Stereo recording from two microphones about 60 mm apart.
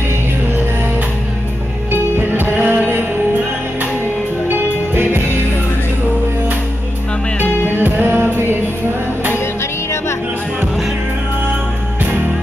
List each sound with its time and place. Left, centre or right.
1.9 s music: right
4.5 s music: right
7.3 s music: left
7.7 s music: right